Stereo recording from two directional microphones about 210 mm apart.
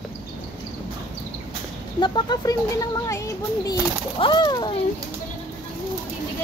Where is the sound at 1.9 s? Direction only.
20° left (ahead or behind).